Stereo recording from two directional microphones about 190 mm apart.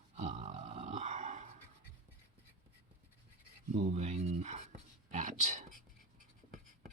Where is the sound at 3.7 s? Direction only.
40° right (ahead or behind).